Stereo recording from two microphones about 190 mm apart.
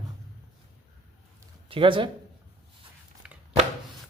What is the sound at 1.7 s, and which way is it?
Speech, 25° right (ahead or behind).